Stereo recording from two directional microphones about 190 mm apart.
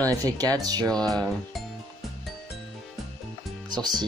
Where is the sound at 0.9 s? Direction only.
5° left (ahead or behind).